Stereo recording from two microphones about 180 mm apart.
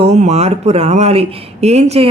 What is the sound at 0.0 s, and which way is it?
A woman's voice, 40° right (ahead or behind).